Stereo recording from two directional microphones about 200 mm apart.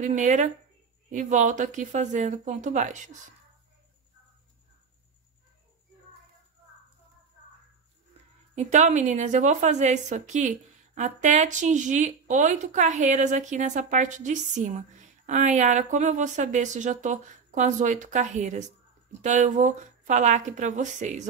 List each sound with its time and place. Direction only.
0.0 s speech: 40° right (ahead or behind)
8.5 s speech: 35° right (ahead or behind)